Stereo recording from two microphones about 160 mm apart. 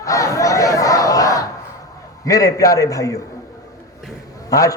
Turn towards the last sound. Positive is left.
turn(degrees=20)  # may be behind; listen again after turning